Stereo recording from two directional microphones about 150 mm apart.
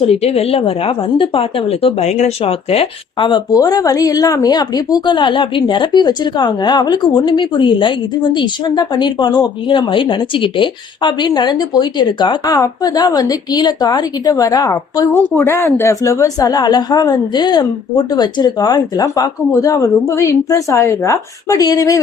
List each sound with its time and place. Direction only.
0.0 s a woman's voice: 40° left (ahead or behind); by 22.0 s 25° left (ahead or behind)